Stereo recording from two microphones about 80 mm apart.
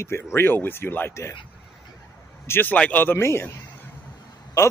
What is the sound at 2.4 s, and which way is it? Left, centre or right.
Speech, left.